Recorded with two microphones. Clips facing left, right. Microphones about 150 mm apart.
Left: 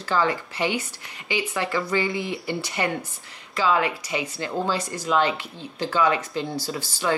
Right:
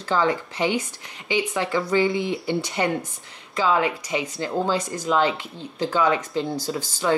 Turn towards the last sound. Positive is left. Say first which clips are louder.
# right 2 dB
turn(degrees=5)  # may be behind; listen again after turning